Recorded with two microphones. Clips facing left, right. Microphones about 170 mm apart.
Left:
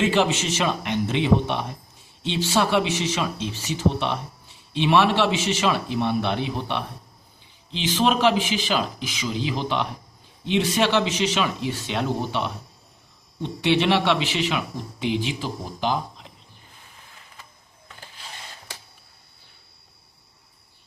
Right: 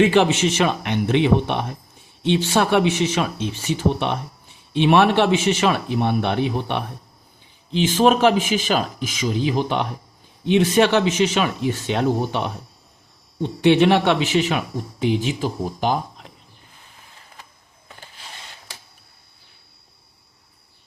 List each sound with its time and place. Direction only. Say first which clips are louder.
0.0 s a man's voice: right 5 dB; 60° right (ahead or behind)